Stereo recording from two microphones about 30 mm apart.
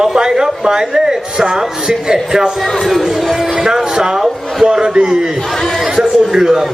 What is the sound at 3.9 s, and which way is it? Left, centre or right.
A man's voice, right.